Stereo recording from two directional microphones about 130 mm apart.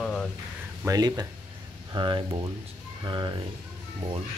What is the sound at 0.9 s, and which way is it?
Speech, 30° right (ahead or behind).